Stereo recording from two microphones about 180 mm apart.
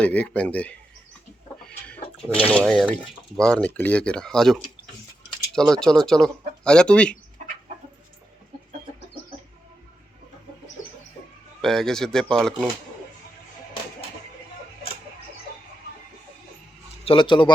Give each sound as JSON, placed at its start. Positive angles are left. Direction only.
{"t": 0.0, "sound": "speech", "side_deg": 5}
{"t": 1.6, "sound": "a sound", "side_deg": 5}
{"t": 2.5, "sound": "speech", "side_deg": 5}
{"t": 11.6, "sound": "speech", "side_deg": 0}
{"t": 17.1, "sound": "speech", "side_deg": 25}